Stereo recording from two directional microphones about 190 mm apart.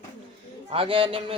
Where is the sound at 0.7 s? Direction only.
30° right (ahead or behind).